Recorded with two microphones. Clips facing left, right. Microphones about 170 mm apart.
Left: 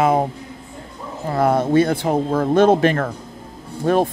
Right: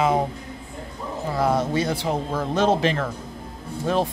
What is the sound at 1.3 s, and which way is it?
A man's voice, 55° left (ahead or behind).